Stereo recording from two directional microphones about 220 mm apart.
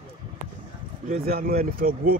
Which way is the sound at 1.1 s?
40° right (ahead or behind).